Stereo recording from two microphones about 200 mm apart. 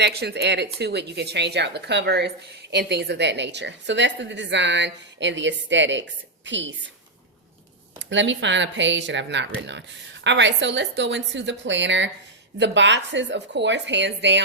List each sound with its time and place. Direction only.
0.2 s speech: 55° right (ahead or behind)
7.9 s speech: 65° right (ahead or behind)